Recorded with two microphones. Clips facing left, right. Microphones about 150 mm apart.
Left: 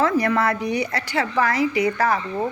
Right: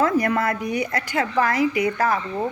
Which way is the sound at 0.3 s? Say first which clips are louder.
Left 1 dB; 50° right (ahead or behind).